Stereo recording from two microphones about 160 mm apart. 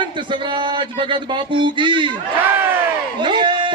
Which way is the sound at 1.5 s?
30° right (ahead or behind).